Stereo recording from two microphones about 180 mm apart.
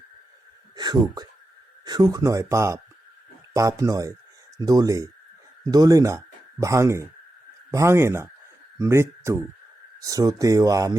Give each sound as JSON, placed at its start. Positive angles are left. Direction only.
{"t": 0.8, "sound": "speech", "side_deg": -25}